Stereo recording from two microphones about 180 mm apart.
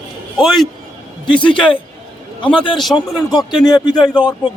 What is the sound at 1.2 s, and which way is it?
Speech, 25° left (ahead or behind).